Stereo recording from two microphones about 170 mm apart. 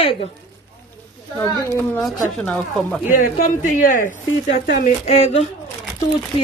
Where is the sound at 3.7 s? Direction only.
55° left (ahead or behind).